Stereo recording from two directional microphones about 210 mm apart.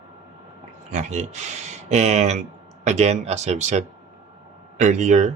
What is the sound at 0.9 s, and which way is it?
Speech, 35° right (ahead or behind).